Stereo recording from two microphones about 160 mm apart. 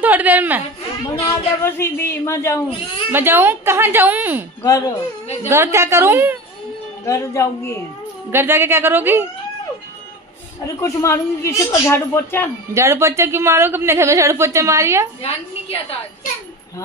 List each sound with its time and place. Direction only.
0.0 s a woman's voice: 10° right (ahead or behind)
1.2 s speech: 15° left (ahead or behind)
3.1 s a woman's voice: 15° right (ahead or behind)
4.6 s speech: 20° left (ahead or behind)
5.5 s a woman's voice: 15° right (ahead or behind)
7.1 s speech: 20° left (ahead or behind)
8.3 s a woman's voice: 15° right (ahead or behind)
10.8 s speech: 20° left (ahead or behind)
12.7 s a woman's voice: 15° right (ahead or behind)